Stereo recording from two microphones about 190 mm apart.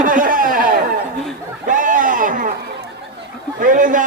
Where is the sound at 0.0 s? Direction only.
45° right (ahead or behind).